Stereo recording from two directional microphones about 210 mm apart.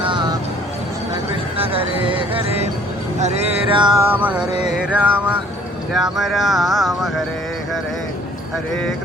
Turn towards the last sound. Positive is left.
turn(degrees=0)  # may be behind; listen again after turning